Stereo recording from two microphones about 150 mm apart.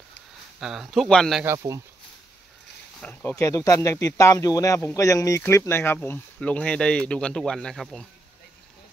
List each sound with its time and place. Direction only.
0.6 s speech: 5° right (ahead or behind)
3.0 s speech: 10° left (ahead or behind)